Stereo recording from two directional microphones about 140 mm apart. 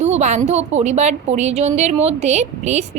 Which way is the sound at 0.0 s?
55° right (ahead or behind).